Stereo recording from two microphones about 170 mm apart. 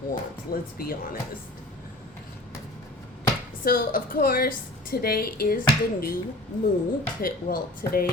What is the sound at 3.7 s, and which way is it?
Speech, 60° left (ahead or behind).